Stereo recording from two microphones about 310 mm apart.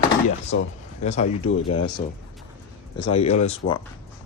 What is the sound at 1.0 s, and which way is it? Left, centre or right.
Speech, left.